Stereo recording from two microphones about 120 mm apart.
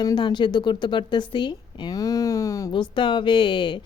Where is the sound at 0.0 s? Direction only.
35° left (ahead or behind).